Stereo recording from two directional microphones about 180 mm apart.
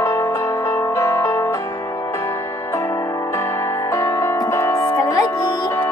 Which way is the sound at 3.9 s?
15° left (ahead or behind).